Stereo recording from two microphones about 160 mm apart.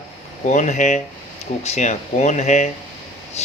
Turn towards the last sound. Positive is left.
turn(degrees=45)  # may be behind; listen again after turning